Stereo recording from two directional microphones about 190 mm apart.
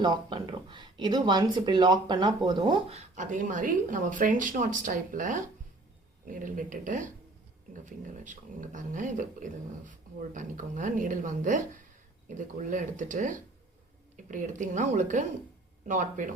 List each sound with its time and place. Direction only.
0.0 s speech: 25° right (ahead or behind); by 16.3 s 40° right (ahead or behind)